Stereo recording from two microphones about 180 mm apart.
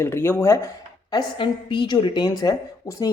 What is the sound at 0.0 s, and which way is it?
Speech, 15° left (ahead or behind).